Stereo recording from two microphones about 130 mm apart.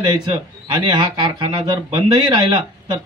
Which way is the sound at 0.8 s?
40° right (ahead or behind).